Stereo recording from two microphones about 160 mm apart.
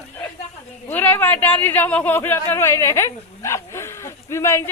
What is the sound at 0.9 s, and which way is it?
Speech, 10° left (ahead or behind).